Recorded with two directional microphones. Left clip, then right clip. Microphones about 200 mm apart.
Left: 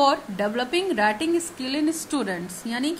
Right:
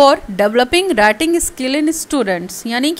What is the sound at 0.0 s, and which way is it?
A woman's voice, 40° right (ahead or behind).